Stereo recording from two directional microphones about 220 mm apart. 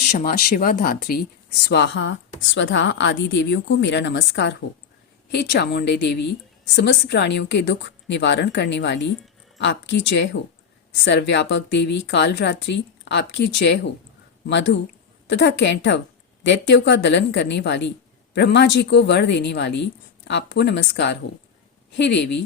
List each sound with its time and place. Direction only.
0.1 s a woman's voice: 35° left (ahead or behind); by 22.4 s 50° left (ahead or behind)